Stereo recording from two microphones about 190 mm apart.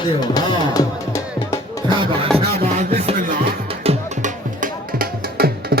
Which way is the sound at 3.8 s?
30° right (ahead or behind).